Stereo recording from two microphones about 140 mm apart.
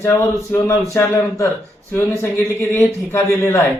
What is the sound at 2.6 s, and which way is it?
Speech, 15° left (ahead or behind).